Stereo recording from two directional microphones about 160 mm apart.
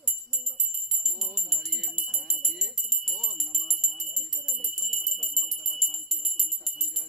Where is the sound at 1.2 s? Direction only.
Centre (ahead or behind).